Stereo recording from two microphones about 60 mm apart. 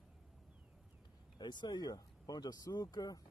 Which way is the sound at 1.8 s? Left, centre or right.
Left.